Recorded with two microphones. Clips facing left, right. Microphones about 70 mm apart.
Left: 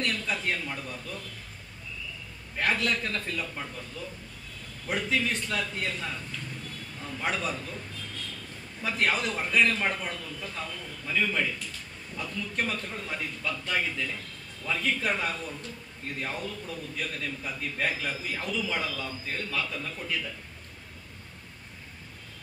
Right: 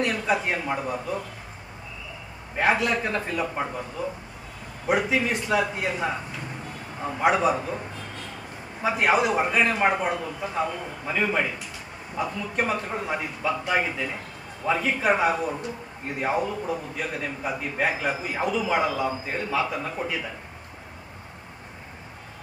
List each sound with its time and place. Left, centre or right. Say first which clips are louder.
0.0 s a man's voice: right 6 dB; centre
2.5 s a man's voice: right 6 dB; centre